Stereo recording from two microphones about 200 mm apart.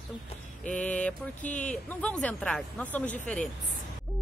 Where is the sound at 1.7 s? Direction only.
5° left (ahead or behind).